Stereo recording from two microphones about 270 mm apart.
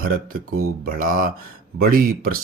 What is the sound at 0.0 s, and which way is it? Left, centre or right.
Mantra, right.